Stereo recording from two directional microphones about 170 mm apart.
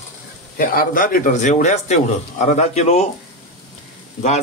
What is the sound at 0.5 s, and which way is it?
A man's voice, 60° left (ahead or behind).